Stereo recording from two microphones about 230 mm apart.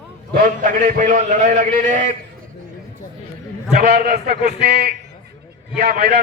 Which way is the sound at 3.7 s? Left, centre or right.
Right.